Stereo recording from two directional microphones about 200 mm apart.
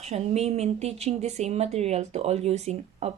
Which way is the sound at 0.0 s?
30° right (ahead or behind).